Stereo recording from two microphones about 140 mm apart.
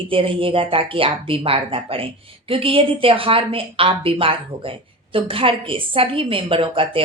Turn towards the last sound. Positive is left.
turn(degrees=-40)  # may be behind; listen again after turning